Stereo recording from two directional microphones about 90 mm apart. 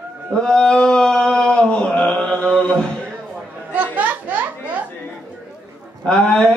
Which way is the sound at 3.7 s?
20° right (ahead or behind).